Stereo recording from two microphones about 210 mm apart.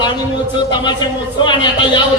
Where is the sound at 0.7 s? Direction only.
20° left (ahead or behind).